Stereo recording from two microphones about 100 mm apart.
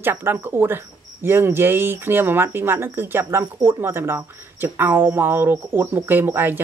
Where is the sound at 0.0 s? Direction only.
20° right (ahead or behind).